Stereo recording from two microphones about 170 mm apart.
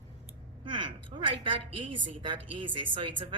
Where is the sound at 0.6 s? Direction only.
30° right (ahead or behind).